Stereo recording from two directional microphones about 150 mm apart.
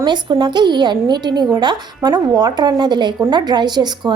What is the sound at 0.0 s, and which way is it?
A woman's voice, 30° right (ahead or behind).